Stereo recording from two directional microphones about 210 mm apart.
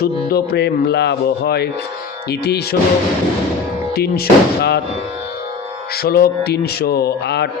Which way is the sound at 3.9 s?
50° left (ahead or behind).